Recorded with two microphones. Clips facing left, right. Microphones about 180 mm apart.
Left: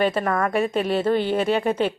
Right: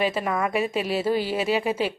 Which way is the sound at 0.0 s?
5° right (ahead or behind).